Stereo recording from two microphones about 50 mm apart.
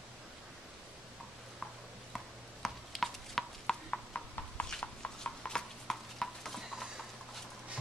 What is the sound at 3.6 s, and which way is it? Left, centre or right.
Horse, left.